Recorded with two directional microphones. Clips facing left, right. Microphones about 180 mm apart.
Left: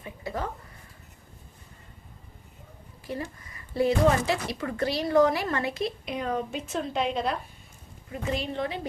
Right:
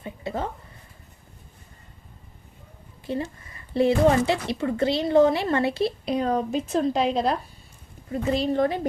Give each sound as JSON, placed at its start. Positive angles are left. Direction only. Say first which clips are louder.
{"t": 0.0, "sound": "a woman's voice", "louder": "right 3 dB", "side_deg": -25}
{"t": 3.1, "sound": "speech", "louder": "right 5 dB", "side_deg": -25}